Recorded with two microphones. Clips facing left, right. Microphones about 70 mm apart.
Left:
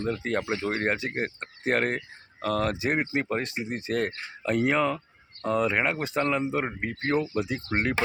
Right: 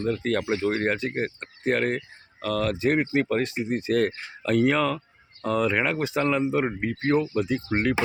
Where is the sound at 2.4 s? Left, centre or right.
Left.